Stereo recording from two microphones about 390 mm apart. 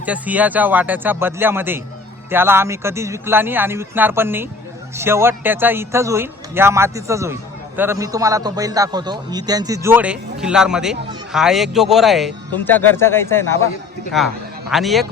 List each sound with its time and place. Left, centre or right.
0.0 s a man's voice: centre